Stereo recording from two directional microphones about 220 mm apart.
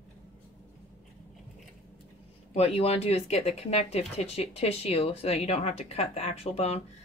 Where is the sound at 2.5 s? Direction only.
25° left (ahead or behind).